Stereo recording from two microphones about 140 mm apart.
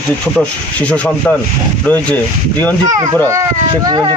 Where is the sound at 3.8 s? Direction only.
30° right (ahead or behind).